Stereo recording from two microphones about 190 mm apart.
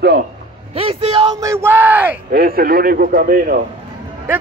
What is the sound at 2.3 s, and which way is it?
A man's voice, 50° right (ahead or behind).